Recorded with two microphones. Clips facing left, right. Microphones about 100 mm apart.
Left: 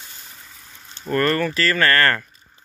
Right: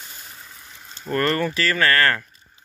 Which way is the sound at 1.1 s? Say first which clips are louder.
Left 2 dB; 20° right (ahead or behind).